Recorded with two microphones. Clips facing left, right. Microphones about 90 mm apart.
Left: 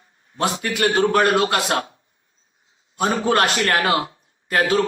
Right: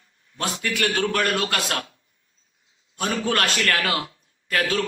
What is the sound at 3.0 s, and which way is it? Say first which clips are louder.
A man's voice: left 5 dB; 30° left (ahead or behind).